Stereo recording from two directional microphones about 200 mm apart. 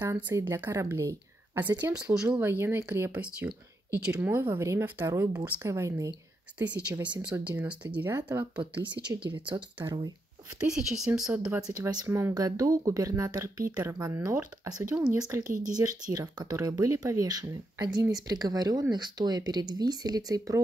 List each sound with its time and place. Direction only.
0.0 s speech: 10° right (ahead or behind)
9.8 s speech: 25° right (ahead or behind)
10.6 s speech: 5° right (ahead or behind)
11.7 s speech: 20° right (ahead or behind)
15.5 s speech: 40° right (ahead or behind)
15.8 s speech: 20° right (ahead or behind)